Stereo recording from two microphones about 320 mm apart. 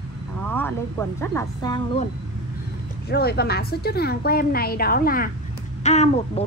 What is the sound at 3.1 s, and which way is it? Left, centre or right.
A woman's voice, left.